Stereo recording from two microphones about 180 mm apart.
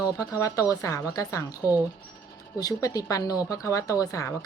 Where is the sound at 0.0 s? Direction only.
20° left (ahead or behind).